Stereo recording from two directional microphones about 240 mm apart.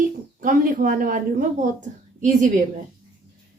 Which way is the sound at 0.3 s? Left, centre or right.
Right.